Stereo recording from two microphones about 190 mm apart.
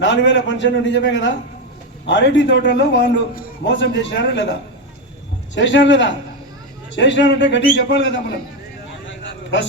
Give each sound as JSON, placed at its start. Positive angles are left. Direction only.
{"t": 0.0, "sound": "a man's voice", "side_deg": 70}
{"t": 5.5, "sound": "a man's voice", "side_deg": 70}
{"t": 9.0, "sound": "a sound", "side_deg": 75}